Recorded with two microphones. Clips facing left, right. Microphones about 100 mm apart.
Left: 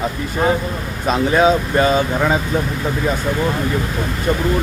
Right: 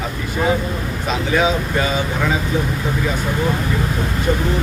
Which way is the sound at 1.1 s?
40° left (ahead or behind).